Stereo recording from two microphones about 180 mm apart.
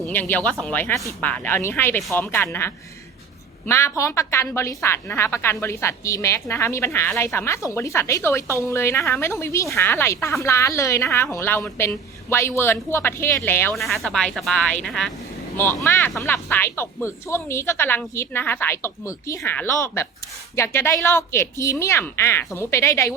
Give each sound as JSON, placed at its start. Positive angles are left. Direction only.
{"t": 0.0, "sound": "speech", "side_deg": 10}
{"t": 13.7, "sound": "speech", "side_deg": 0}
{"t": 15.5, "sound": "speech", "side_deg": 10}